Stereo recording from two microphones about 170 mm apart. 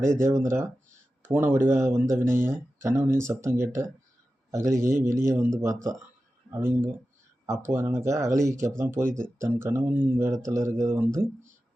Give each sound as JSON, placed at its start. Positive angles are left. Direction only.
{"t": 0.1, "sound": "speech", "side_deg": -15}